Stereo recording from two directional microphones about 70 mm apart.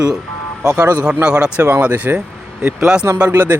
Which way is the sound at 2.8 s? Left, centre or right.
Centre.